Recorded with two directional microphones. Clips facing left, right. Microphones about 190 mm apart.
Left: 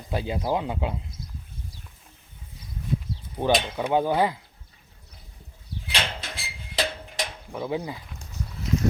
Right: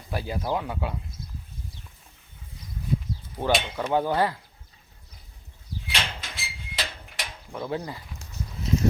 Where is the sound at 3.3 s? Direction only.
15° left (ahead or behind).